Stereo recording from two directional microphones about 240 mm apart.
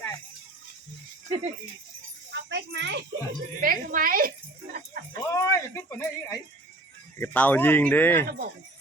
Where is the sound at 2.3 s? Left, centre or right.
Right.